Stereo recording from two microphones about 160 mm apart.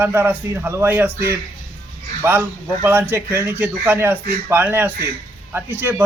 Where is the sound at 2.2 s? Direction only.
15° right (ahead or behind).